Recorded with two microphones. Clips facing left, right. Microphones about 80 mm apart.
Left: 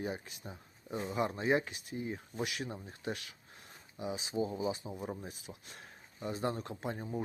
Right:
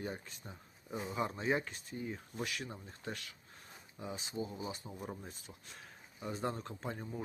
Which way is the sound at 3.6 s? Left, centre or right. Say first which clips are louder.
Left 6 dB; centre.